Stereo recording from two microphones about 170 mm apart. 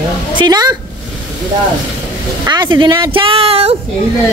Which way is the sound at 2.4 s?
25° right (ahead or behind).